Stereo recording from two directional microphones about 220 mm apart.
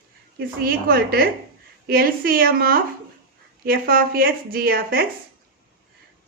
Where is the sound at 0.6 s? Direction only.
40° right (ahead or behind).